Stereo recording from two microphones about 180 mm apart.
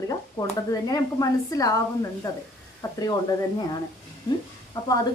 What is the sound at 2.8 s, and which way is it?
Speech, 20° left (ahead or behind).